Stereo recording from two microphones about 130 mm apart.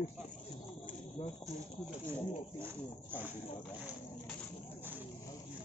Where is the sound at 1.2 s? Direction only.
45° left (ahead or behind).